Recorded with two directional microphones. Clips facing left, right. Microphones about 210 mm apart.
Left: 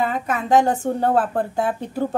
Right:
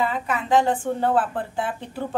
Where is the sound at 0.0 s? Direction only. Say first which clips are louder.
Left 2 dB; 45° left (ahead or behind).